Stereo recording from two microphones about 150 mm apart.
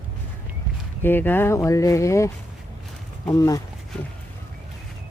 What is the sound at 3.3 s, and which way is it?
Speech, 25° left (ahead or behind).